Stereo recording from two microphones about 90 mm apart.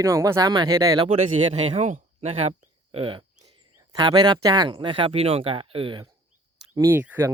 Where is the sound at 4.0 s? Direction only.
55° right (ahead or behind); by 5.9 s 85° right.